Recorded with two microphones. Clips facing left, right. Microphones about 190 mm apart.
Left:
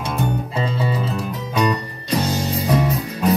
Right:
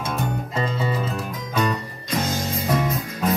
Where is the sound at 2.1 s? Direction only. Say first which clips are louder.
Left 4 dB; 35° left (ahead or behind).